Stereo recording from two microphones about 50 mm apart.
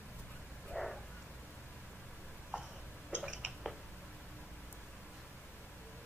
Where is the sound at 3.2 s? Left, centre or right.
Centre.